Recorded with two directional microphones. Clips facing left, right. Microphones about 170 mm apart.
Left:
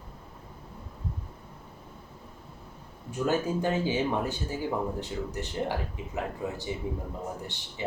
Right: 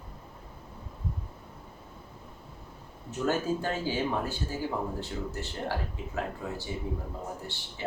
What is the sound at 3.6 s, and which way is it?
Speech, 20° left (ahead or behind).